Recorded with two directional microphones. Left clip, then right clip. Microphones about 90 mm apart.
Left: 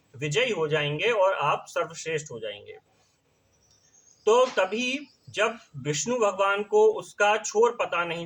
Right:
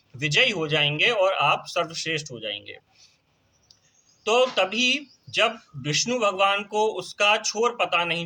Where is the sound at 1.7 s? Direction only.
40° left (ahead or behind).